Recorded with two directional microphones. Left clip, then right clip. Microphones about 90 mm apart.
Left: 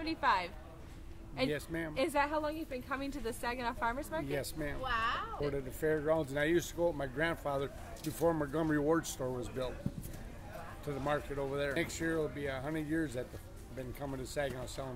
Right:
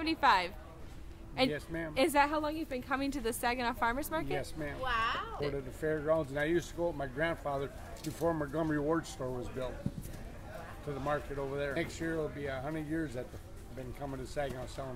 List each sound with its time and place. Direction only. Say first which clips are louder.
0.0 s a woman's voice: right 4 dB; 45° right (ahead or behind)
1.5 s speech: even; 40° left (ahead or behind)
2.0 s a woman's voice: right 4 dB; 45° right (ahead or behind)
4.4 s speech: even; 40° left (ahead or behind)
4.8 s speech: right 2 dB; 25° right (ahead or behind)
5.5 s speech: left 3 dB; 40° left (ahead or behind)
11.1 s speech: even; 40° left (ahead or behind)